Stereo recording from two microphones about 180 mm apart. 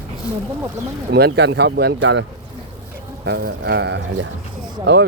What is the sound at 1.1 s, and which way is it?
Speech, 65° right (ahead or behind).